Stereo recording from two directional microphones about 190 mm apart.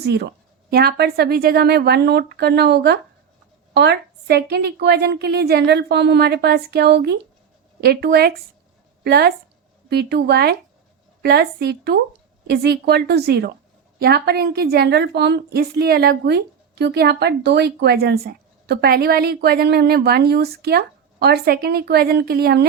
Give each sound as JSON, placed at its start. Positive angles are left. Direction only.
{"t": 0.0, "sound": "a woman's voice", "side_deg": -55}